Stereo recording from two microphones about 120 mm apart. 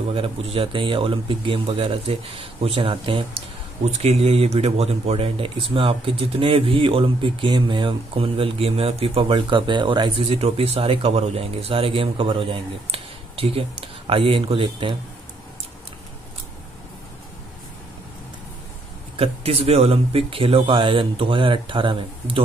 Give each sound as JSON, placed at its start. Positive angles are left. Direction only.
{"t": 0.1, "sound": "speech", "side_deg": -50}
{"t": 3.8, "sound": "speech", "side_deg": -60}
{"t": 19.1, "sound": "speech", "side_deg": -55}